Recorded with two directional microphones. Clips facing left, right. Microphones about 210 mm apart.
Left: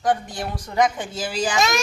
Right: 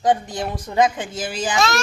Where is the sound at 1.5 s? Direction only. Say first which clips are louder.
Right 3 dB; 15° left (ahead or behind).